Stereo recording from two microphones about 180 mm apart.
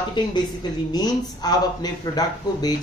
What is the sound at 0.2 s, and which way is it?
Speech, 25° left (ahead or behind).